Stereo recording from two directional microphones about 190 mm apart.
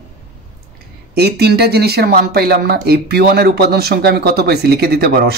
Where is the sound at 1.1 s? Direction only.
55° right (ahead or behind).